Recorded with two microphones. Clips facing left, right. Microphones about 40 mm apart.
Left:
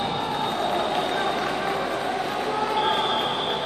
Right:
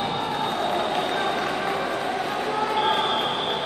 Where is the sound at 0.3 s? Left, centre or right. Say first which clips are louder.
Even; centre.